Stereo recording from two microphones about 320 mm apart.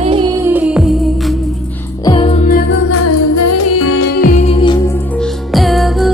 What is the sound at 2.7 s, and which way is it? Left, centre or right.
Music, left.